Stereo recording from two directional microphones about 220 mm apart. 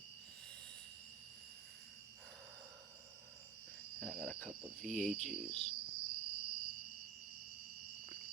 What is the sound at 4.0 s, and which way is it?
Cricket, centre (ahead or behind).